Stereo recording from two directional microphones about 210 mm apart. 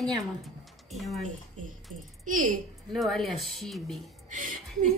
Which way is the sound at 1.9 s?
90° right.